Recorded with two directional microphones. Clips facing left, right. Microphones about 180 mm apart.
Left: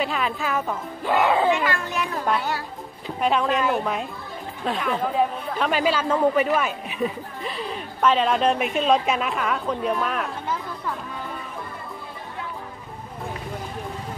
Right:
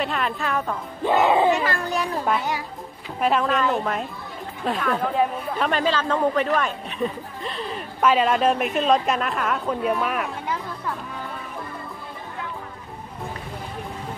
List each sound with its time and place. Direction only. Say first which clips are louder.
0.0 s speech: even; centre (ahead or behind)
1.0 s speech: right 2 dB; 20° right (ahead or behind)
1.5 s speech: right 1 dB; 35° right (ahead or behind)
3.2 s speech: right 1 dB; centre (ahead or behind)